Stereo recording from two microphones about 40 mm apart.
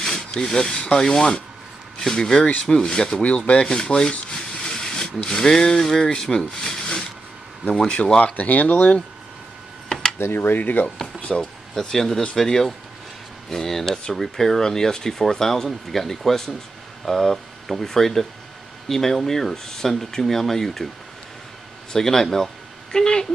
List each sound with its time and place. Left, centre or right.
0.2 s speech: left
3.2 s speech: left
3.6 s rub: centre
5.2 s speech: centre
8.4 s speech: left
10.1 s speech: left
11.1 s a sound: left
11.8 s speech: centre
21.9 s speech: centre
22.9 s speech: centre